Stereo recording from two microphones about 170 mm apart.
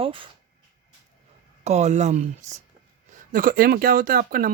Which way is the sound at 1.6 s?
40° right (ahead or behind).